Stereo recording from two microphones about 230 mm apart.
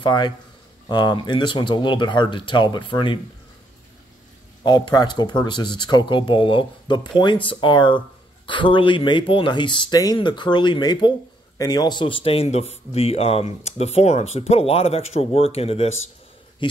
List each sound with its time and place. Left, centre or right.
0.0 s speech: centre
4.6 s speech: centre